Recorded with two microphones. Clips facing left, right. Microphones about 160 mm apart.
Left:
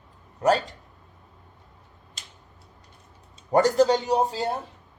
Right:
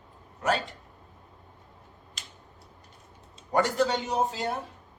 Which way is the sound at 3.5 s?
40° left (ahead or behind).